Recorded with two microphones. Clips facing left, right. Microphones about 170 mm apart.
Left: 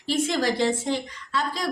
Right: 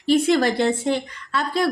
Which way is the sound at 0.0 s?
65° right (ahead or behind).